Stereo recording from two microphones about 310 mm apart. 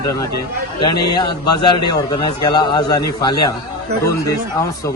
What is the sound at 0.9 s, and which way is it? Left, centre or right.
Speech, left.